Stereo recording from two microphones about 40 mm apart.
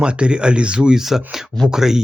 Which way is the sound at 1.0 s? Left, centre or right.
Centre.